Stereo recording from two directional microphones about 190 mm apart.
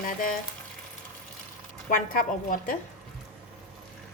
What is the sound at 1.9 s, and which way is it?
Speech, 45° left (ahead or behind).